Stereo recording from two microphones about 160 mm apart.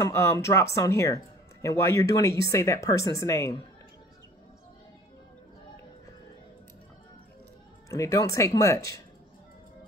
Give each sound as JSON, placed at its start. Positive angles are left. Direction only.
{"t": 0.0, "sound": "speech", "side_deg": 15}
{"t": 7.9, "sound": "speech", "side_deg": 20}